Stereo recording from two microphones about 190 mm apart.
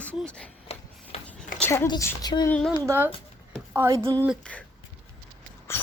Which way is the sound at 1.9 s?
20° left (ahead or behind).